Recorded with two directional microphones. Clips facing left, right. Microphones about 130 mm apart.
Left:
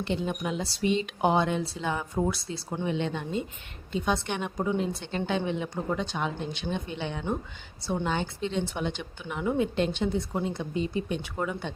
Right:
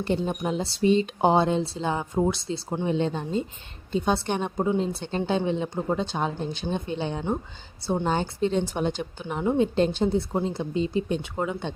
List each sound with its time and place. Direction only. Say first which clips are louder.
0.0 s speech: right 4 dB; 40° right (ahead or behind); by 11.7 s 20° right (ahead or behind)